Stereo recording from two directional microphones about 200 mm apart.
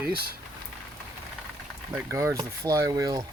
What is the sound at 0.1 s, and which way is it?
Speech, 50° right (ahead or behind).